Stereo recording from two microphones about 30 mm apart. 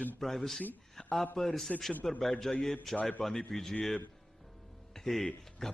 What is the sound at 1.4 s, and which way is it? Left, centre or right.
A man's voice, centre.